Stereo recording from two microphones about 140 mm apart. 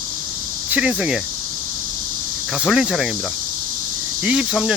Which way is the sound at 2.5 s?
5° right (ahead or behind).